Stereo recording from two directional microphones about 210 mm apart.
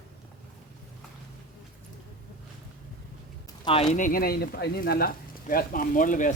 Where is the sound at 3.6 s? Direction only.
30° left (ahead or behind).